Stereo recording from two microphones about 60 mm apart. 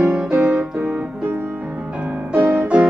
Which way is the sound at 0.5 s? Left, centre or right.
Right.